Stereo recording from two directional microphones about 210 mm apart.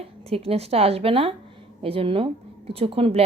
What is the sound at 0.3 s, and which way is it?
Speech, 30° right (ahead or behind).